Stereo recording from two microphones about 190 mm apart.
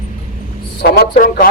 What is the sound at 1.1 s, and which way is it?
Speech, 45° left (ahead or behind).